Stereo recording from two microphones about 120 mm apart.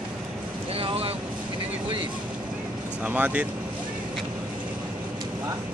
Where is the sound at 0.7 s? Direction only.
50° right (ahead or behind).